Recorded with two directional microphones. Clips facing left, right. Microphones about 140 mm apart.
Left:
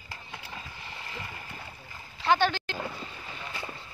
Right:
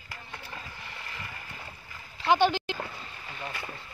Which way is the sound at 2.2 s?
10° right (ahead or behind).